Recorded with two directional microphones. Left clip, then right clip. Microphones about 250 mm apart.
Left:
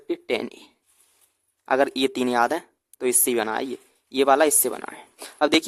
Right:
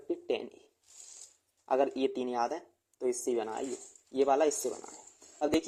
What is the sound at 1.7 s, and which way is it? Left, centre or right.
Speech, left.